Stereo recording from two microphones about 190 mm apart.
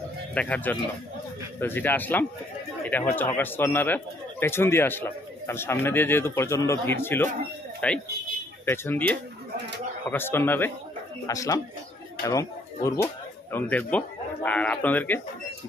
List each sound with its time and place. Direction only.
0.3 s speech: 10° left (ahead or behind)